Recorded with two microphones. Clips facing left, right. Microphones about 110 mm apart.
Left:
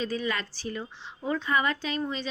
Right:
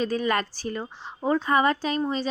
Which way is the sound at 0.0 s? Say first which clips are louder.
Right 6 dB; 50° right (ahead or behind).